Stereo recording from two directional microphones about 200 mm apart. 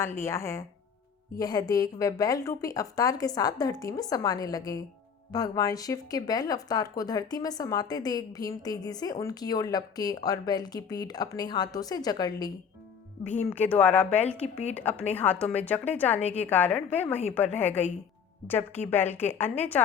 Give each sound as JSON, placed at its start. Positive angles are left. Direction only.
{"t": 0.0, "sound": "a woman's voice", "side_deg": 15}
{"t": 13.5, "sound": "a woman's voice", "side_deg": 10}